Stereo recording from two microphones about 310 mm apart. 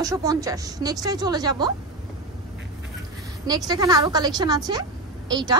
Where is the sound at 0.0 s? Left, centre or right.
Centre.